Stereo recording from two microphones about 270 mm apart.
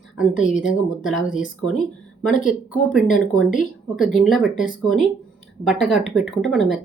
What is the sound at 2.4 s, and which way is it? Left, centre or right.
Speech, centre.